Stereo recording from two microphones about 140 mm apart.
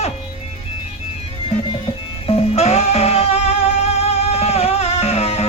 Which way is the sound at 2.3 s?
45° left (ahead or behind).